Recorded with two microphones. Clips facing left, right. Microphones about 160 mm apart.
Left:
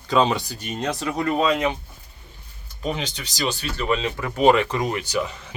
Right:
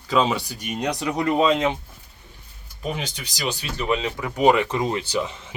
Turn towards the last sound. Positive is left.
turn(degrees=-25)  # may be behind; listen again after turning